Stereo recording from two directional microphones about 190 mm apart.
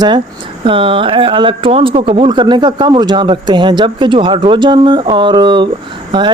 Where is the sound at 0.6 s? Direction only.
25° right (ahead or behind).